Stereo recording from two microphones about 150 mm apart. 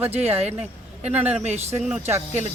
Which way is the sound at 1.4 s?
50° right (ahead or behind).